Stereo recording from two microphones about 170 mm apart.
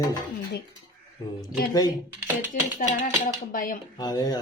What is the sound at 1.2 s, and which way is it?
Speech, 20° left (ahead or behind).